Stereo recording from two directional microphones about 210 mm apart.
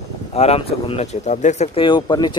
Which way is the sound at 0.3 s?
30° left (ahead or behind).